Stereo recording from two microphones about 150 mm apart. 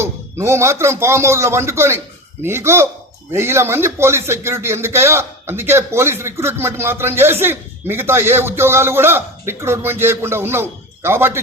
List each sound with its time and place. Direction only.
0.0 s speech: 15° right (ahead or behind)